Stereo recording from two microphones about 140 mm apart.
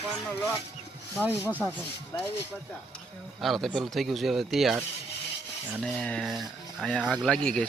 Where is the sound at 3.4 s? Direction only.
Centre (ahead or behind).